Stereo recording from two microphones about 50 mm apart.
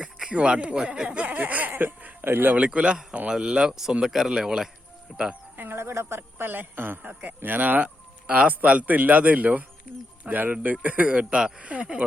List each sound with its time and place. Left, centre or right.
0.0 s speech: centre
1.4 s speech: right
2.6 s speech: right; by 5.2 s centre
5.5 s cricket: right
5.8 s speech: right
7.1 s speech: right